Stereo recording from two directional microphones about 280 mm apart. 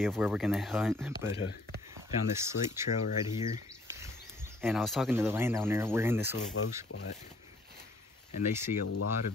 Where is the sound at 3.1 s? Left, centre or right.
Left.